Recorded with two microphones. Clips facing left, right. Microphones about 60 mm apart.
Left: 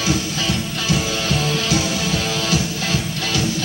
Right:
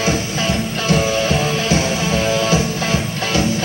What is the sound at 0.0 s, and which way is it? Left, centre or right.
Music, right.